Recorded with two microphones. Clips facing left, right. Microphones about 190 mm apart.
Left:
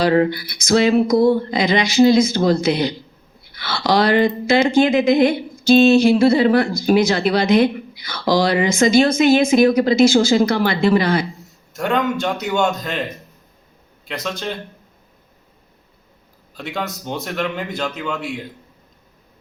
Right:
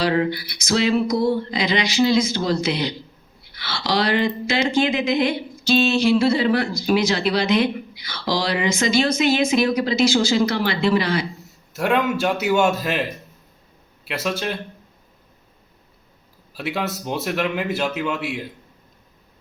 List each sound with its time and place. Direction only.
0.0 s speech: 45° left (ahead or behind)
11.7 s a man's voice: 5° right (ahead or behind)
16.6 s a man's voice: 5° right (ahead or behind)